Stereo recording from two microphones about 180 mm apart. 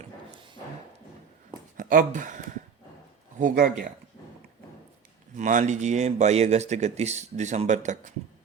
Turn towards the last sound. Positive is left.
turn(degrees=-40)  # may be behind; listen again after turning